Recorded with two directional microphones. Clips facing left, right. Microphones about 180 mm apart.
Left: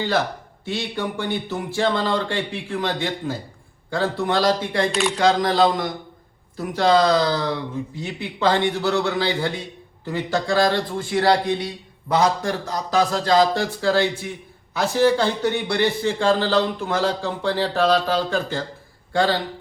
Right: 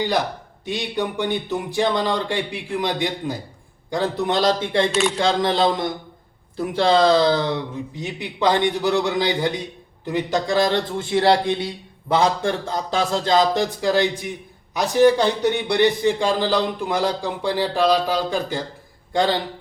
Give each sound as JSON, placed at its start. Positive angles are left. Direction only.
{"t": 0.6, "sound": "a man's voice", "side_deg": -15}
{"t": 4.9, "sound": "speech", "side_deg": 0}
{"t": 5.2, "sound": "a man's voice", "side_deg": -25}